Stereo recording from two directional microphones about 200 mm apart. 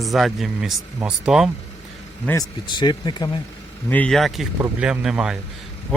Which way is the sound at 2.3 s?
20° left (ahead or behind).